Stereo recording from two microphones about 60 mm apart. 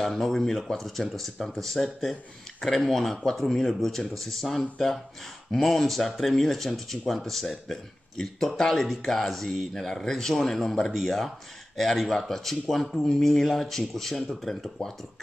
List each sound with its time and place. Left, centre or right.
0.0 s speech: centre